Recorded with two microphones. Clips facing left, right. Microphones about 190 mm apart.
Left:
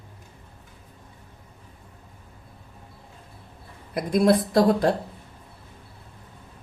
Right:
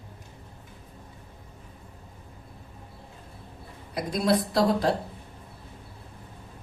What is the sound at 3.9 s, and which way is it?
A woman's voice, 55° left (ahead or behind).